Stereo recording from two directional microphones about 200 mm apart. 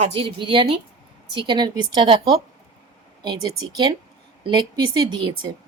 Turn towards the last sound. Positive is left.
turn(degrees=-20)  # may be behind; listen again after turning